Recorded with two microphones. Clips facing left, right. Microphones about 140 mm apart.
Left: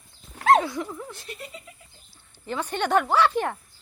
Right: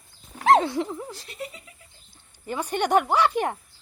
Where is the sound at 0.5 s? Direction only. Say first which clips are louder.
Right 2 dB; 30° right (ahead or behind).